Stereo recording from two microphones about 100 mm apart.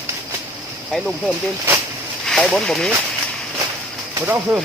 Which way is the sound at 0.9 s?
5° left (ahead or behind).